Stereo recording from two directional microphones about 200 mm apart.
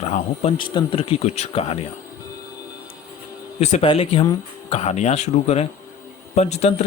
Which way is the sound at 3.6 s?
30° left (ahead or behind).